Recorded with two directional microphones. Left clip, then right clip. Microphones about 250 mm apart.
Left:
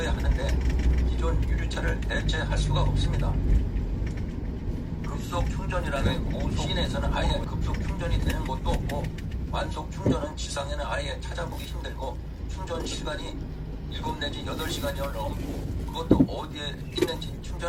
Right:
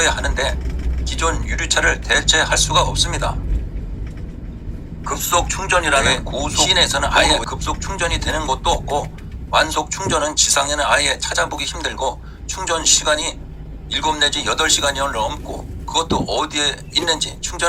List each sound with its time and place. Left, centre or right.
0.0 s vehicle: right
1.1 s speech: right
5.3 s speech: right